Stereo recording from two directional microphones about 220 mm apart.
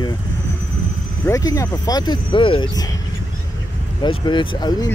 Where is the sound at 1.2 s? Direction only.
15° left (ahead or behind).